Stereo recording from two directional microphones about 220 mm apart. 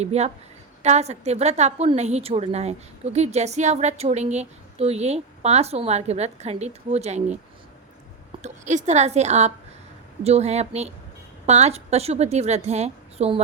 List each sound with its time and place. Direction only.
0.0 s a woman's voice: 30° right (ahead or behind)
8.4 s a woman's voice: 30° right (ahead or behind)